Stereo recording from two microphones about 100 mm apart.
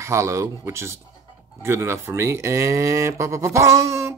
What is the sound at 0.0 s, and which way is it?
Speech, 30° right (ahead or behind).